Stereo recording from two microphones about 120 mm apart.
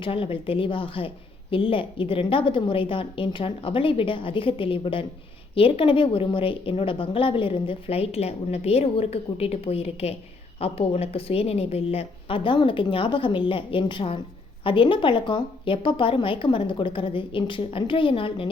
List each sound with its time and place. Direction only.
0.0 s a woman's voice: 50° left (ahead or behind)